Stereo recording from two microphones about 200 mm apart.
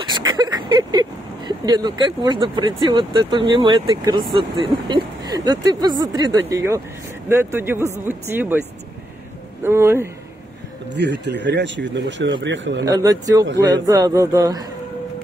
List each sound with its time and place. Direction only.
0.0 s speech: 20° right (ahead or behind)
9.6 s speech: 15° right (ahead or behind)
11.0 s speech: 60° right (ahead or behind)
12.8 s speech: 20° right (ahead or behind)